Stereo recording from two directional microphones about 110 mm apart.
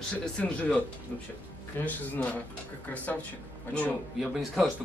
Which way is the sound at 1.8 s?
20° left (ahead or behind).